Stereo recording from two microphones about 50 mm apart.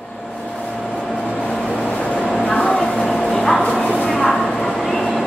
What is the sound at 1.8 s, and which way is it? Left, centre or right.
Vehicle, left.